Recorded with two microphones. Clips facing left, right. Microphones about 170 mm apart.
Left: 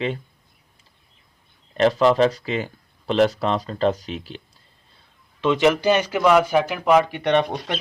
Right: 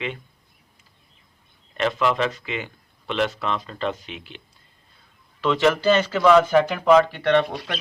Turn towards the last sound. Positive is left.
turn(degrees=20)  # may be behind; listen again after turning